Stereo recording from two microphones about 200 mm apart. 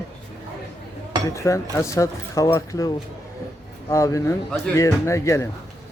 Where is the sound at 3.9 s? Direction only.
15° left (ahead or behind).